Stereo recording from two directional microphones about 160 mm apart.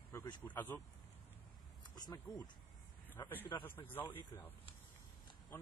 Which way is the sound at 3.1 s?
10° left (ahead or behind).